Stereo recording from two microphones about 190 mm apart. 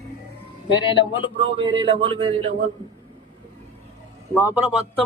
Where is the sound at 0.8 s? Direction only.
25° left (ahead or behind).